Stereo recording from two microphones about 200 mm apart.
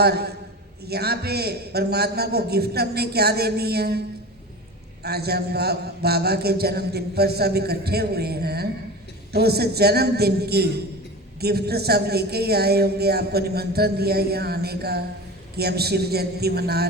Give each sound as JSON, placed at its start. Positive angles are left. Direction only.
{"t": 0.0, "sound": "a woman's voice", "side_deg": -55}
{"t": 5.0, "sound": "a woman's voice", "side_deg": -55}